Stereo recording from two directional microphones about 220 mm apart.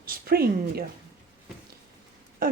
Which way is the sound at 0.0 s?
40° right (ahead or behind).